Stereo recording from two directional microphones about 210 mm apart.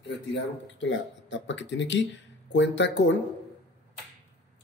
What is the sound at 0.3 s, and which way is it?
Speech, 60° left (ahead or behind).